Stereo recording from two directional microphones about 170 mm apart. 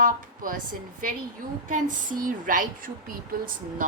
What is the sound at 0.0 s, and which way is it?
Speech, 55° right (ahead or behind).